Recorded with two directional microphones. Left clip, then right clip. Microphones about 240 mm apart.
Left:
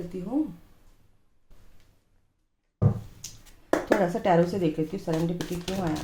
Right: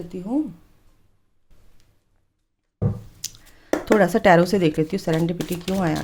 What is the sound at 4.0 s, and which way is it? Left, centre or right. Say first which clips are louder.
Speech: right 7 dB; right.